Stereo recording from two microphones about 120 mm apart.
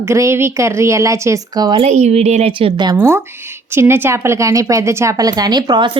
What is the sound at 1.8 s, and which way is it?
A woman's voice, 65° right (ahead or behind).